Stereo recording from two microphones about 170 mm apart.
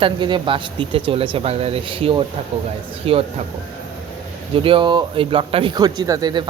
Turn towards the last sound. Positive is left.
turn(degrees=-25)  # may be behind; listen again after turning